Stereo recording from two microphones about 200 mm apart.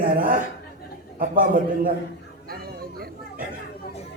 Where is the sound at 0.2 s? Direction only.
45° right (ahead or behind).